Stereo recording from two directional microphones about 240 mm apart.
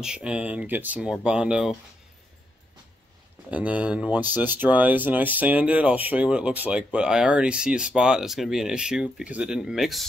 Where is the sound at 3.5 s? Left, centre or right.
Centre.